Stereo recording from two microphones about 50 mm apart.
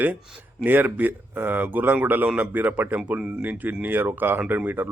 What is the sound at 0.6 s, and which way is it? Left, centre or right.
A man's voice, right.